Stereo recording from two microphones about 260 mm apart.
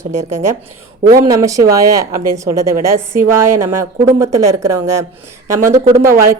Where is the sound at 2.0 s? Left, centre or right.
Right.